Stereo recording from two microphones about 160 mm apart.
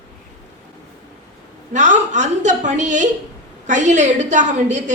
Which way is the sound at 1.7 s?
50° right (ahead or behind).